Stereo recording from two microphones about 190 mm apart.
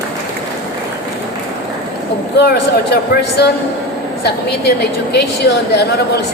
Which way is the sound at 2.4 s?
60° left (ahead or behind).